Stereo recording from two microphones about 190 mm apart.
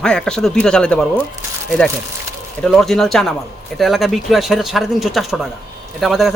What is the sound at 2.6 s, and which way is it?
Speech, centre (ahead or behind).